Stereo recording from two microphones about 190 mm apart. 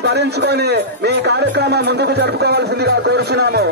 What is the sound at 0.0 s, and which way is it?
Speech, 60° right (ahead or behind).